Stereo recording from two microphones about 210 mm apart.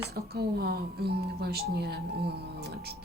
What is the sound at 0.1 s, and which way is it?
Speech, 50° right (ahead or behind).